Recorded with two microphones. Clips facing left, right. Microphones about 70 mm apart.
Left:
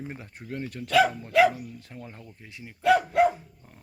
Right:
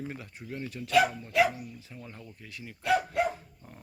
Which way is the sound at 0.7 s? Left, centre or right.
Left.